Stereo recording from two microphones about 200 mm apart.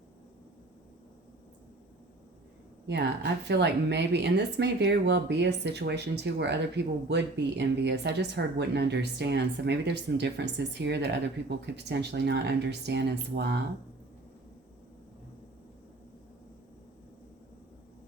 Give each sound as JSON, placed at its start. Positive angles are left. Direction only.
{"t": 3.4, "sound": "speech", "side_deg": -60}